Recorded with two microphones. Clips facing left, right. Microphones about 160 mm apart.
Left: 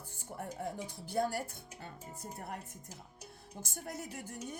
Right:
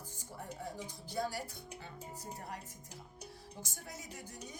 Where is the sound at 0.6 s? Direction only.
55° left (ahead or behind).